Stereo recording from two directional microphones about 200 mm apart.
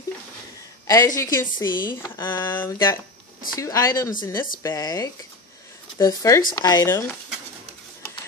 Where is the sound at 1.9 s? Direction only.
10° left (ahead or behind).